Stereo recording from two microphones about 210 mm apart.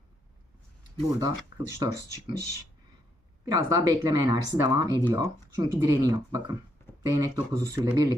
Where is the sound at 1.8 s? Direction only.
15° right (ahead or behind).